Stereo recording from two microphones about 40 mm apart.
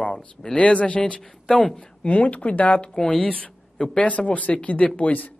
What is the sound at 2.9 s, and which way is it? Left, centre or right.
Speech, left.